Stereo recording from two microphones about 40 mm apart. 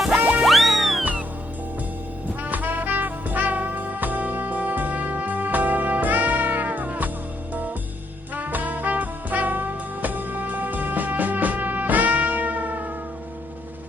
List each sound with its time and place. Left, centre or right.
0.3 s music: centre
2.4 s music: right
8.4 s music: right